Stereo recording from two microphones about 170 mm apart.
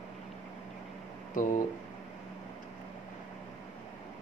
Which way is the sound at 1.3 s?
50° left (ahead or behind).